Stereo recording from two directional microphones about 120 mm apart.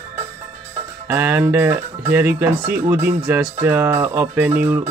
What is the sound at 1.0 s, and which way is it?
Speech, 20° right (ahead or behind).